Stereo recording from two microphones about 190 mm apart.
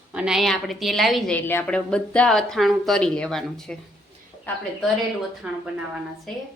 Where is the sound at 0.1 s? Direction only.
5° right (ahead or behind).